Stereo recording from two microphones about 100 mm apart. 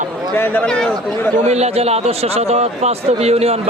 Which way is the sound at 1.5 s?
90° right.